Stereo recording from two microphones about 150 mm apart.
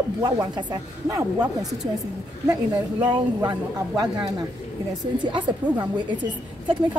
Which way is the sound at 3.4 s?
30° right (ahead or behind).